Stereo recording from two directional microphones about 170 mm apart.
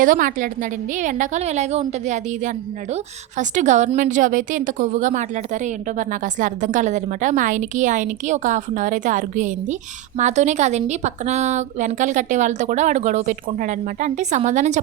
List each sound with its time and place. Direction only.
0.0 s a woman's voice: 50° right (ahead or behind)